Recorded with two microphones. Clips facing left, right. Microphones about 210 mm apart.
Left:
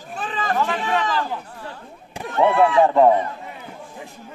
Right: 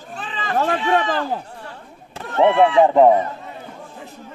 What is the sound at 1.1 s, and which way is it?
Speech, 45° right (ahead or behind).